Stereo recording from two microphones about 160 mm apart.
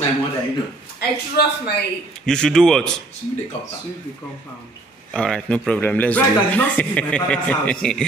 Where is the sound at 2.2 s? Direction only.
5° left (ahead or behind).